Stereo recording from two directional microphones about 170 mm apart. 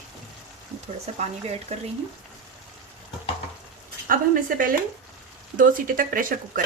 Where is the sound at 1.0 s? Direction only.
40° right (ahead or behind).